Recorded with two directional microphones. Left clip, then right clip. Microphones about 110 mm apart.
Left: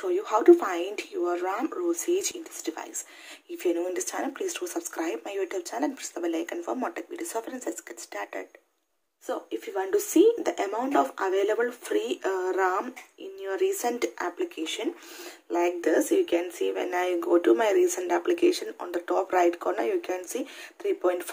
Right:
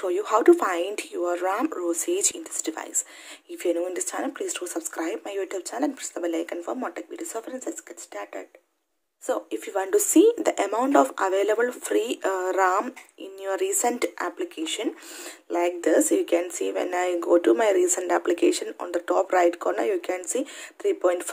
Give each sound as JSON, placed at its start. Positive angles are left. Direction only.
{"t": 0.0, "sound": "speech", "side_deg": -45}
{"t": 3.5, "sound": "speech", "side_deg": -20}
{"t": 9.2, "sound": "speech", "side_deg": -60}
{"t": 13.9, "sound": "speech", "side_deg": -35}